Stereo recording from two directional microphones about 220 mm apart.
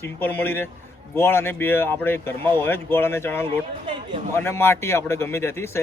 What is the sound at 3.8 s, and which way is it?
Speech, 25° right (ahead or behind).